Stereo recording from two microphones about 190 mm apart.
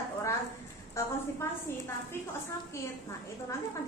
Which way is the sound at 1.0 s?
15° left (ahead or behind).